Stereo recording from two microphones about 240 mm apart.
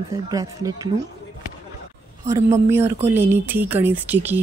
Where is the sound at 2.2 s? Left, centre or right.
Centre.